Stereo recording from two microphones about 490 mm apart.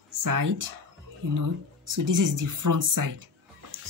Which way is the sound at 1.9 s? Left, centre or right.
Right.